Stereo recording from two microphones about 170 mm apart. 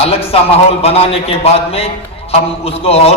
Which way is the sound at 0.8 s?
35° left (ahead or behind).